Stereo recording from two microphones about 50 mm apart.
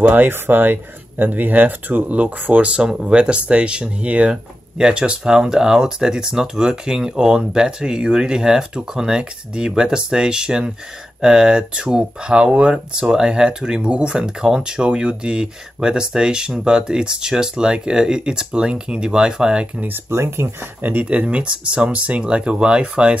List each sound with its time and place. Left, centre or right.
0.0 s speech: right
2.9 s speech: centre
20.1 s speech: right
20.8 s speech: right